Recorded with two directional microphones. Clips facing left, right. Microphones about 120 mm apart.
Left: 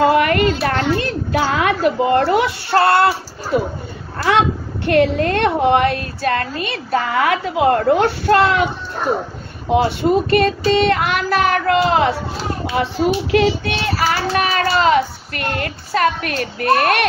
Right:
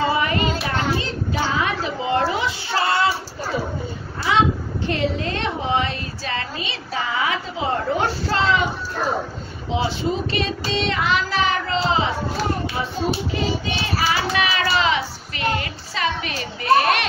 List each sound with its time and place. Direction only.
0.0 s a child's voice: 65° left (ahead or behind)
9.7 s a woman's voice: 55° left (ahead or behind)
12.7 s speech: 75° left (ahead or behind)
14.0 s a child's voice: 45° left (ahead or behind)